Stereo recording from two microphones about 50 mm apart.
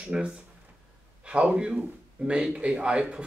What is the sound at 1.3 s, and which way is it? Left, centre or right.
Speech, right.